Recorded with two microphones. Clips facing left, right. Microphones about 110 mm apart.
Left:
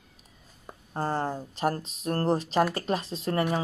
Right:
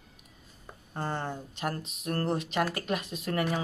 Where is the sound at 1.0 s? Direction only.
35° left (ahead or behind).